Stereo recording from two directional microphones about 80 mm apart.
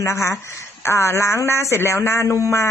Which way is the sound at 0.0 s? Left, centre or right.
Left.